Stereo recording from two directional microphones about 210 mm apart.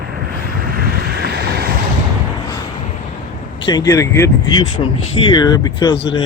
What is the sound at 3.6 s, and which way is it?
Speech, 20° left (ahead or behind).